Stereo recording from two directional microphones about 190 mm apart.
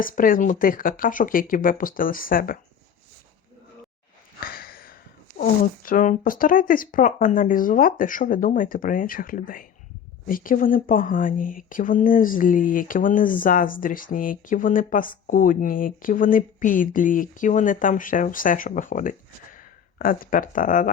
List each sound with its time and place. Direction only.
0.0 s speech: 45° left (ahead or behind)
4.4 s a sound: 50° left (ahead or behind)
5.4 s speech: 50° left (ahead or behind)